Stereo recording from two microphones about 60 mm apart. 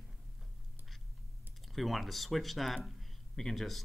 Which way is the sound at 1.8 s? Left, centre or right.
Centre.